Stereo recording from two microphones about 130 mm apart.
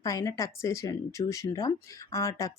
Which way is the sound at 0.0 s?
25° left (ahead or behind).